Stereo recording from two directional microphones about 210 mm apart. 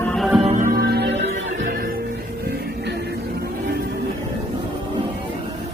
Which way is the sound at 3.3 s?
50° right (ahead or behind).